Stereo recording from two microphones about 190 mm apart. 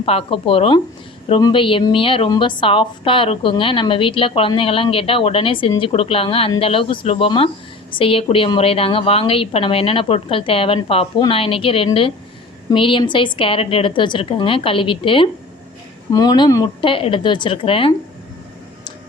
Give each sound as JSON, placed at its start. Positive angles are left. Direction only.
{"t": 0.0, "sound": "a woman's voice", "side_deg": 30}